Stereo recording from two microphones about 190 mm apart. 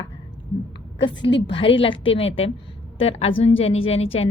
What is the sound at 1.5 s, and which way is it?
A woman's voice, 30° left (ahead or behind).